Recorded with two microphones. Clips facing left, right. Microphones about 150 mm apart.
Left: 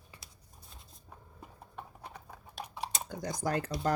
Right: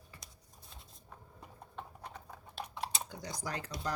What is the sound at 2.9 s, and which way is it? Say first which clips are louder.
Speech: left 5 dB; 50° left (ahead or behind).